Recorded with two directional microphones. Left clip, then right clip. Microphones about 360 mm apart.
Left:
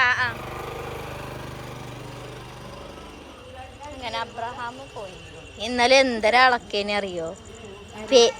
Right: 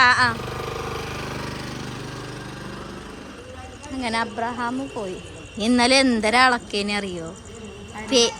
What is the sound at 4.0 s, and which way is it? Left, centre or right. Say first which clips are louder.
Speech: right 5 dB; centre.